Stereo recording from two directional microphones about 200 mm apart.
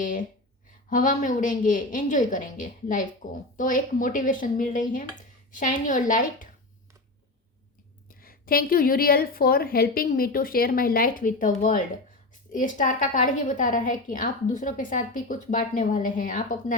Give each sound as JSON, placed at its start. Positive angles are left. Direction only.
{"t": 0.0, "sound": "a sound", "side_deg": 40}
{"t": 0.9, "sound": "a woman's voice", "side_deg": 40}
{"t": 8.0, "sound": "a woman's voice", "side_deg": 45}